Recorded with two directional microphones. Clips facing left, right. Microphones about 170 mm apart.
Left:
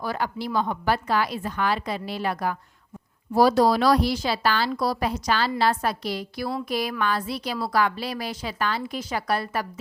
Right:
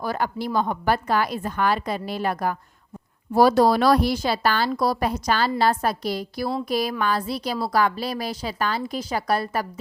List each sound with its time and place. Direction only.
0.0 s a woman's voice: 45° right (ahead or behind)